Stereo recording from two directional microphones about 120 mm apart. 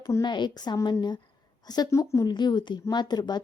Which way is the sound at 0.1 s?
35° left (ahead or behind).